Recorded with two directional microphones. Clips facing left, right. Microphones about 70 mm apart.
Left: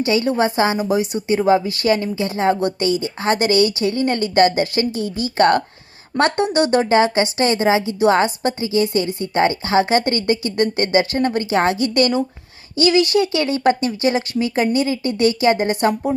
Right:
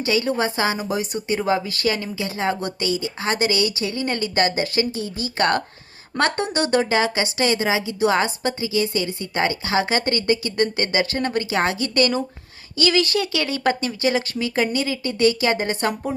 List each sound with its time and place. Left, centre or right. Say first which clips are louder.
0.0 s a woman's voice: left 4 dB; left